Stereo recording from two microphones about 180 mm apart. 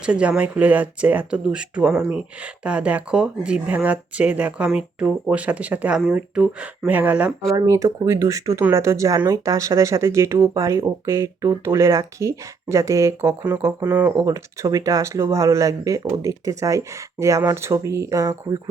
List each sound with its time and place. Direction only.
0.0 s speech: 5° right (ahead or behind)
7.5 s speech: 20° right (ahead or behind)